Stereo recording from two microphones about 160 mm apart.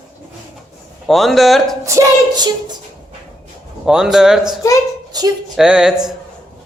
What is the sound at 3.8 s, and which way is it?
Speech, 5° right (ahead or behind).